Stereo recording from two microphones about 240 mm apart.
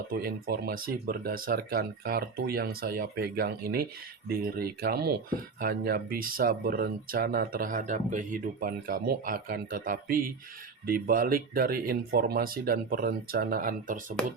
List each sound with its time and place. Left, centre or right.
0.1 s speech: right